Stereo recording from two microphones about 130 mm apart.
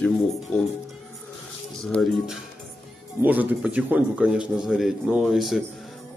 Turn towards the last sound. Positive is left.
turn(degrees=0)  # may be behind; listen again after turning